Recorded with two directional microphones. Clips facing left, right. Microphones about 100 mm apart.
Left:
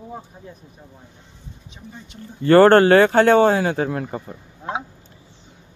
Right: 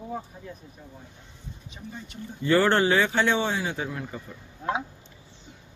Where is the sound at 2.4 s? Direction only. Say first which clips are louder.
Left 10 dB; 55° left (ahead or behind).